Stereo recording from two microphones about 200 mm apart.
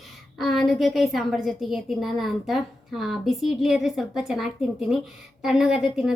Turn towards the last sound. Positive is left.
turn(degrees=0)  # may be behind; listen again after turning